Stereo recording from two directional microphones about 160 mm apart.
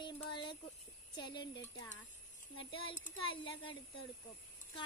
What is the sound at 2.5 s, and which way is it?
Speech, 35° left (ahead or behind).